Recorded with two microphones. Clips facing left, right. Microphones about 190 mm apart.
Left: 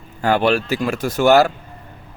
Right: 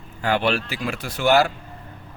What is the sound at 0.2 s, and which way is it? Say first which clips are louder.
Speech: left 5 dB; 45° left (ahead or behind).